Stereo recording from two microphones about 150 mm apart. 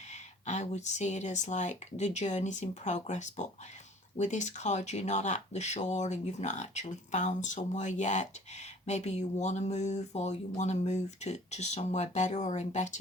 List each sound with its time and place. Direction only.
0.1 s speech: 50° left (ahead or behind)